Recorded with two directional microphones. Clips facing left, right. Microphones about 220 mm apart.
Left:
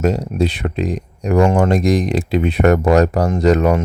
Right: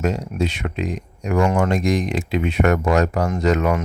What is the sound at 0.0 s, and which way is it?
Speech, 35° left (ahead or behind).